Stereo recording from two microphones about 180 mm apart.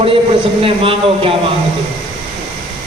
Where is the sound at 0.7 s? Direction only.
30° right (ahead or behind).